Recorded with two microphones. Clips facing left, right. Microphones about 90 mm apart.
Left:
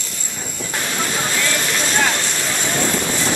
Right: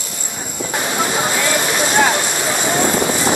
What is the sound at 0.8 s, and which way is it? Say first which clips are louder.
Vehicle: right 4 dB; 20° right (ahead or behind).